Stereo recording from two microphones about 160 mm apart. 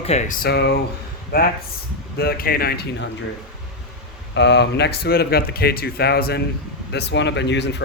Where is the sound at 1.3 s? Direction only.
75° left (ahead or behind).